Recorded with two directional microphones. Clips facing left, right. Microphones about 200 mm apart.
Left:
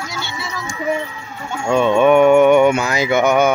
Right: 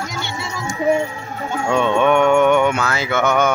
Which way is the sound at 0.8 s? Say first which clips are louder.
Right 4 dB; 40° right (ahead or behind).